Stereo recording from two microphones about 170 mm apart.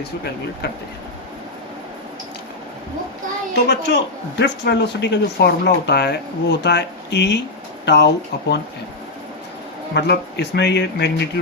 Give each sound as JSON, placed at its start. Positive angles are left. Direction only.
{"t": 3.5, "sound": "speech", "side_deg": 85}
{"t": 9.9, "sound": "speech", "side_deg": 80}